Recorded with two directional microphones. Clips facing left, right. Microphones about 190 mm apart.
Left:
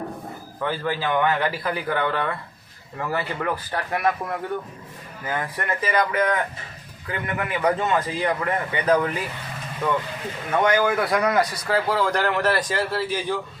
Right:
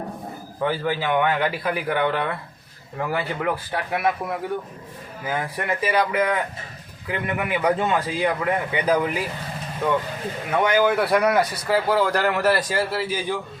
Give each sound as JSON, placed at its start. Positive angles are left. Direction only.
{"t": 0.9, "sound": "a man's voice", "side_deg": -15}
{"t": 10.5, "sound": "a man's voice", "side_deg": -10}